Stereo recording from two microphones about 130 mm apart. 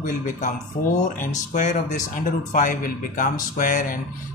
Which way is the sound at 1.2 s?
70° left (ahead or behind).